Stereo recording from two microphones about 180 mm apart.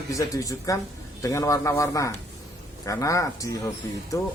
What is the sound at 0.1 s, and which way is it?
A man's voice, 20° left (ahead or behind).